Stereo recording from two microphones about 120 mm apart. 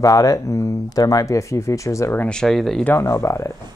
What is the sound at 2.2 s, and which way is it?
Speech, 5° left (ahead or behind).